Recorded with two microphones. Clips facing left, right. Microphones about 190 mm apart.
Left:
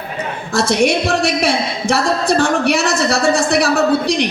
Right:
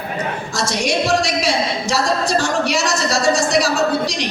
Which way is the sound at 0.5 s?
60° left (ahead or behind).